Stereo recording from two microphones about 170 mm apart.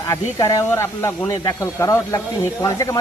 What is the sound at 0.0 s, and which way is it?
Speech, 15° left (ahead or behind).